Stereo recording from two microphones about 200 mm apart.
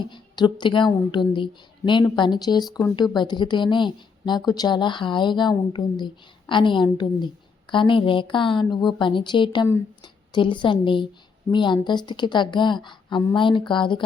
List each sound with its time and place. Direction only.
0.0 s a woman's voice: 20° left (ahead or behind)